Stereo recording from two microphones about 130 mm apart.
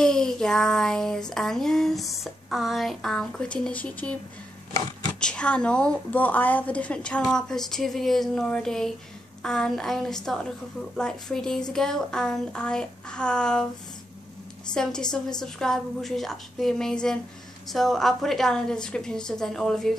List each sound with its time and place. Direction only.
0.0 s child singing: 5° left (ahead or behind)
5.2 s a woman's voice: 10° left (ahead or behind)
9.4 s child singing: 5° left (ahead or behind)
11.7 s a woman's voice: 5° left (ahead or behind)
14.7 s child singing: 5° left (ahead or behind)